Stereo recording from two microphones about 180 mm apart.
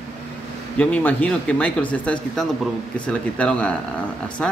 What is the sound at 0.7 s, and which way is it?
Speech, 5° left (ahead or behind).